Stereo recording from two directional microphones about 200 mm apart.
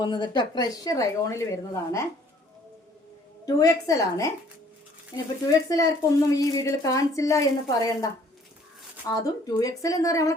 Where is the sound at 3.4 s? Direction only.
20° left (ahead or behind).